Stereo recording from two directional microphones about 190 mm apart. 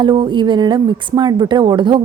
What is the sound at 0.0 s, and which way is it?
Speech, 25° right (ahead or behind).